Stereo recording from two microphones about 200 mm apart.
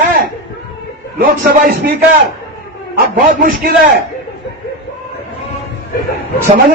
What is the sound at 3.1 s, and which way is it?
Speech, 50° right (ahead or behind).